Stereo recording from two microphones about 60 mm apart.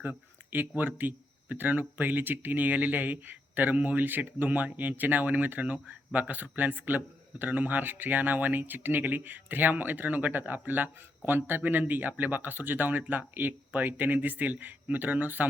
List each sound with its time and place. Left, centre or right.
0.8 s a man's voice: right